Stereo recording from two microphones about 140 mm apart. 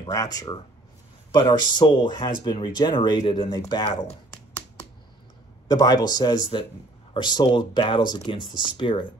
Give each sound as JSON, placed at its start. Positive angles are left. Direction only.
{"t": 0.0, "sound": "speech", "side_deg": 25}
{"t": 5.7, "sound": "speech", "side_deg": 30}